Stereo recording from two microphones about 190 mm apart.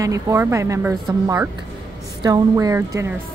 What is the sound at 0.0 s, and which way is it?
A woman's voice, 15° right (ahead or behind).